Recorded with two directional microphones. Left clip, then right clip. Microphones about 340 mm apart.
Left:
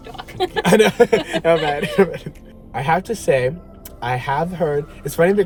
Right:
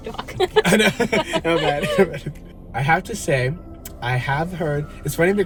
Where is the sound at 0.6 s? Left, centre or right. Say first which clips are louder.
Left 5 dB; centre.